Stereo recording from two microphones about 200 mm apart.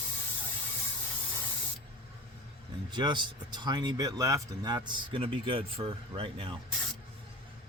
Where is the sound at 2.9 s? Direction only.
20° right (ahead or behind).